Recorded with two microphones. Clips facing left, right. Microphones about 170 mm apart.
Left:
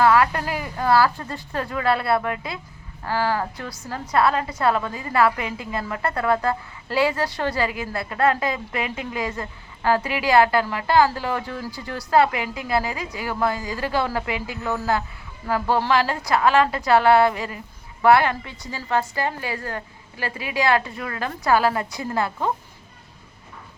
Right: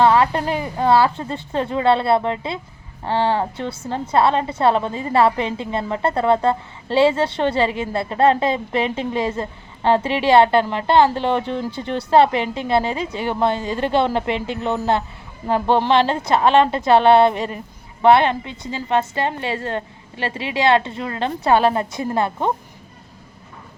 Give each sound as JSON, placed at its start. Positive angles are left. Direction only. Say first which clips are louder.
{"t": 0.0, "sound": "a woman's voice", "louder": "right 3 dB", "side_deg": -25}